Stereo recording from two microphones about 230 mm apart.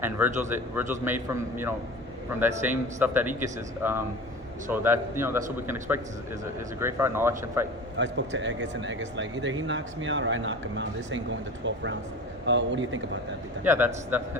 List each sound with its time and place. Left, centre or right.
0.4 s speech: centre
7.9 s speech: right
13.7 s speech: centre